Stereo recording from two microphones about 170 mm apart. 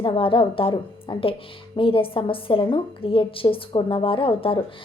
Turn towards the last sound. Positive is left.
turn(degrees=30)  # may be behind; listen again after turning